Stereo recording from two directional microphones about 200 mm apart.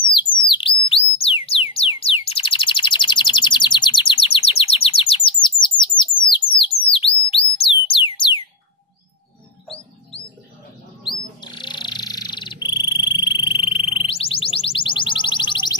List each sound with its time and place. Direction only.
0.0 s bird: 25° left (ahead or behind)
0.5 s a sound: 25° left (ahead or behind)
1.7 s chirp: 30° left (ahead or behind)
5.9 s bird: 25° left (ahead or behind)
6.6 s music: 25° left (ahead or behind)
11.1 s frog: 20° left (ahead or behind)
13.9 s music: 30° left (ahead or behind)